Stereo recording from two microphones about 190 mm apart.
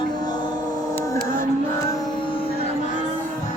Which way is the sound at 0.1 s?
20° left (ahead or behind).